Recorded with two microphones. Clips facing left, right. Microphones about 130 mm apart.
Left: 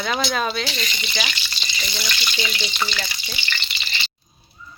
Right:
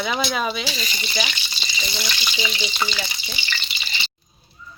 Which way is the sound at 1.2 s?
20° right (ahead or behind).